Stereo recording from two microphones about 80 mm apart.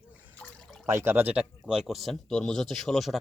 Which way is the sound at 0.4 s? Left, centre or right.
Centre.